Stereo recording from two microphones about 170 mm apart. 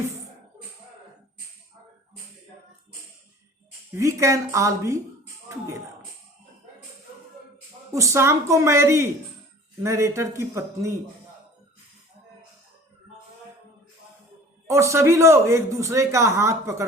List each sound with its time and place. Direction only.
3.9 s a man's voice: 20° right (ahead or behind)
7.9 s a man's voice: 15° right (ahead or behind)
14.7 s a man's voice: 15° right (ahead or behind)